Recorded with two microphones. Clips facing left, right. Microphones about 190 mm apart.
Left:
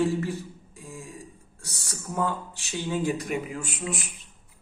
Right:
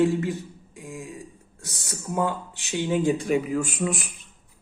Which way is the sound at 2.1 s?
15° right (ahead or behind).